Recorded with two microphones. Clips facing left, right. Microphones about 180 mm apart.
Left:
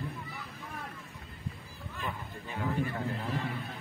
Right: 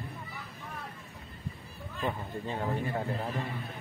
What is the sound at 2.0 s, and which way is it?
Speech, 30° right (ahead or behind).